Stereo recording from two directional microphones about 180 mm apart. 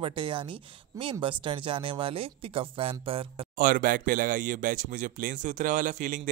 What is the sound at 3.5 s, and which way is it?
Speech, 50° right (ahead or behind).